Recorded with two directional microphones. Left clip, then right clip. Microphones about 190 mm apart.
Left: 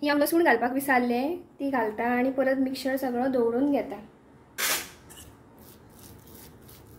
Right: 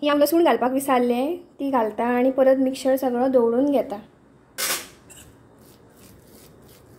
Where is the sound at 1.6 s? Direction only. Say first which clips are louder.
Right 5 dB; 35° right (ahead or behind).